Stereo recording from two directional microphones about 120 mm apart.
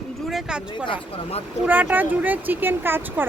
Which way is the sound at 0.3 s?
5° right (ahead or behind).